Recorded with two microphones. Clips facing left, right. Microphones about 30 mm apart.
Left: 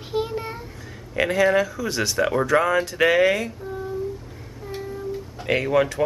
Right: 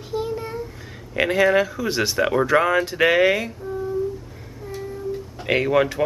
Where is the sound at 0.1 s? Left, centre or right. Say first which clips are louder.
Even; centre.